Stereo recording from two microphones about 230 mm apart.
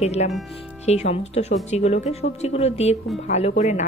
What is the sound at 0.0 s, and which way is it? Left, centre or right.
A woman's voice, left.